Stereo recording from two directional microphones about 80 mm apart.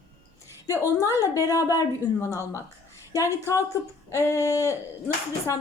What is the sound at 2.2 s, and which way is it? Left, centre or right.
Speech, left.